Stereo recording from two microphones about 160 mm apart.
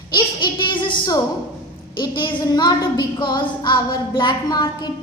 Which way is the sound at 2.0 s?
30° left (ahead or behind).